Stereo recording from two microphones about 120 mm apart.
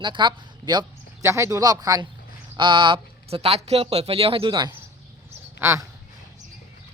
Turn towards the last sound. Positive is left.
turn(degrees=-20)  # may be behind; listen again after turning